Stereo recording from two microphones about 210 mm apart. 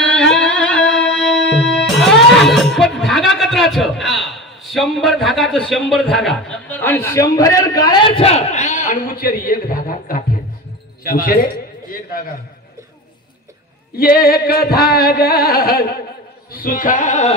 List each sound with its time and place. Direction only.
0.0 s music: 5° left (ahead or behind)
1.6 s a man's voice: 5° left (ahead or behind); by 12.2 s 45° left (ahead or behind)
13.9 s music: 45° left (ahead or behind)
16.5 s a sound: 40° left (ahead or behind)